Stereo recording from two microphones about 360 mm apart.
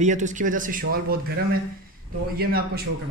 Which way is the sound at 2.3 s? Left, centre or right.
Right.